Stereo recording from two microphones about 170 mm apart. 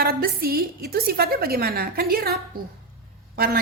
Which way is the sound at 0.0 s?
60° right (ahead or behind).